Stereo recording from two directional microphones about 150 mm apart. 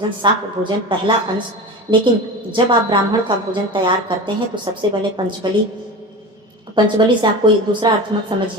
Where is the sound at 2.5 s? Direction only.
35° right (ahead or behind).